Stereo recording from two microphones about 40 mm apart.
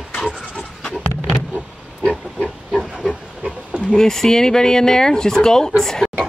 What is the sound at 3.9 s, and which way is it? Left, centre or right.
Speech, centre.